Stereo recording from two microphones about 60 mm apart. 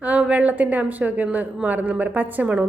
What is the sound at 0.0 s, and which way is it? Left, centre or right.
A woman's voice, right.